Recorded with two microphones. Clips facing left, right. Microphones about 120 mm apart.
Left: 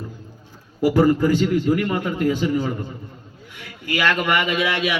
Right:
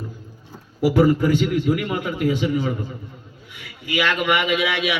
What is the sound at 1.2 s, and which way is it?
A man's voice, 35° left (ahead or behind).